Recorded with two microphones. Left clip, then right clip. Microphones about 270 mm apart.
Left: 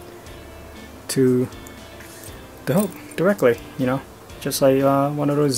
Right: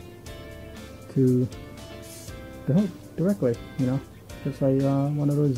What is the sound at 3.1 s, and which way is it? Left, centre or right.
Speech, centre.